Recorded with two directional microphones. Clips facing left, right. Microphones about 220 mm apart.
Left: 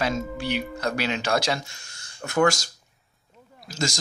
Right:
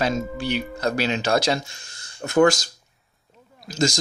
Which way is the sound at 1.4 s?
25° right (ahead or behind).